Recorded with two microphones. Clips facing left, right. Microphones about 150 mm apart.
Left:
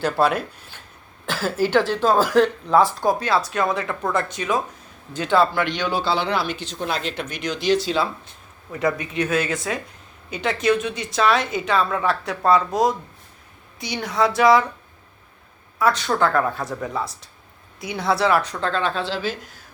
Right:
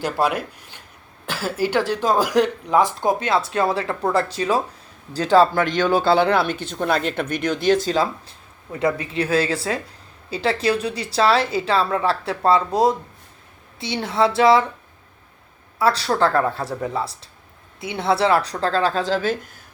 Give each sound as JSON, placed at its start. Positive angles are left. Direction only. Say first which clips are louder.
{"t": 0.0, "sound": "speech", "louder": "left 1 dB", "side_deg": -10}
{"t": 8.8, "sound": "speech", "louder": "right 1 dB", "side_deg": -30}
{"t": 15.8, "sound": "speech", "louder": "right 1 dB", "side_deg": -30}